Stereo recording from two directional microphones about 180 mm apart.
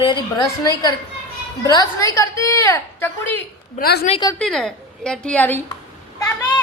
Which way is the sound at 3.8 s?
60° left (ahead or behind).